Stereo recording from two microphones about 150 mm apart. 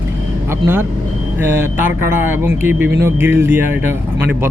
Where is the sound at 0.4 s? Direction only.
15° right (ahead or behind).